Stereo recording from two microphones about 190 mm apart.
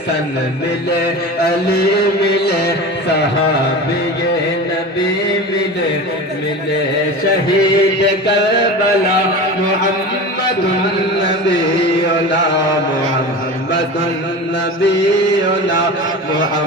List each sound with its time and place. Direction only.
0.9 s music: 55° left (ahead or behind)
7.8 s music: 65° left (ahead or behind)